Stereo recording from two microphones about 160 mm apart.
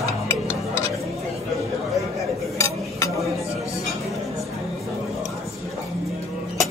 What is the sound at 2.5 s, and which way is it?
Cutlery, 20° left (ahead or behind).